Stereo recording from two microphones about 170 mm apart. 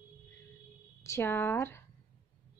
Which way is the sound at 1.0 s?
15° left (ahead or behind).